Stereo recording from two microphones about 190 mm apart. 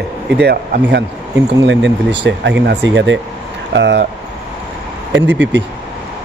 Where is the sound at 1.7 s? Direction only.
70° right (ahead or behind).